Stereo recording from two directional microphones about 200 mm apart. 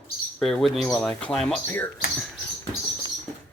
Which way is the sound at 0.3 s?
Centre (ahead or behind).